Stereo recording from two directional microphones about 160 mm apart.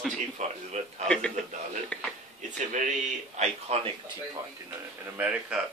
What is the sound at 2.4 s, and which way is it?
A man's voice, 50° right (ahead or behind).